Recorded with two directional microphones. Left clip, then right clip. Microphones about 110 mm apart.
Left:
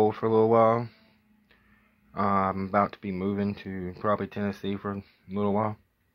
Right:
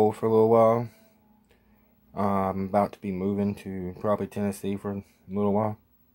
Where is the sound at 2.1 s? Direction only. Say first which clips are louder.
Left 1 dB; 35° right (ahead or behind).